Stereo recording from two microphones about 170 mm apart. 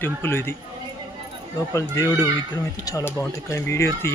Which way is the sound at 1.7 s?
20° left (ahead or behind).